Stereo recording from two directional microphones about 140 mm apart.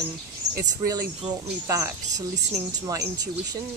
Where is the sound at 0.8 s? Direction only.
25° right (ahead or behind).